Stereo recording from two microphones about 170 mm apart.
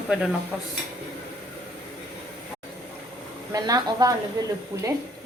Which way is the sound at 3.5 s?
20° right (ahead or behind).